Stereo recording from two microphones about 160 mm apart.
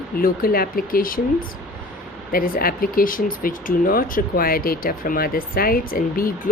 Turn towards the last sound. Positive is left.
turn(degrees=65)  # may be behind; listen again after turning